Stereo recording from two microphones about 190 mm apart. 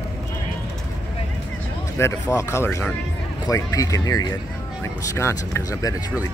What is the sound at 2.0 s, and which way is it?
Speech, 15° left (ahead or behind).